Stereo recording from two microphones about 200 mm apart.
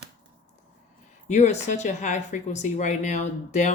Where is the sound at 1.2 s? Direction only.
35° left (ahead or behind).